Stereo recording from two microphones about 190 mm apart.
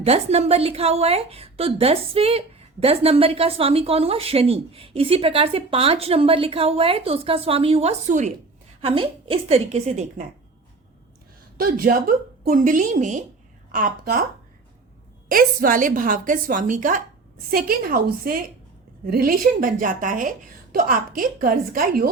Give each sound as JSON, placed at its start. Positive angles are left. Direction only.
{"t": 0.0, "sound": "a woman's voice", "side_deg": -35}
{"t": 11.5, "sound": "a woman's voice", "side_deg": -50}
{"t": 15.3, "sound": "a woman's voice", "side_deg": -45}